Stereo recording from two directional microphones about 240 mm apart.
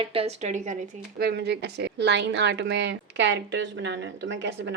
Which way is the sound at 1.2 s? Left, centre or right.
Right.